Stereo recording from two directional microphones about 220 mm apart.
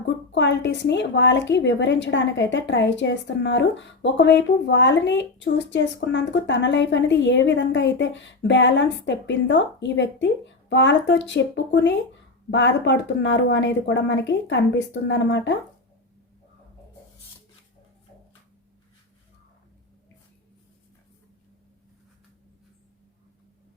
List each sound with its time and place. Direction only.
0.3 s a woman's voice: 55° left (ahead or behind)